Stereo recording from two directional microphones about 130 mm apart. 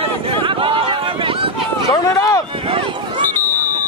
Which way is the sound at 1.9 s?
25° left (ahead or behind).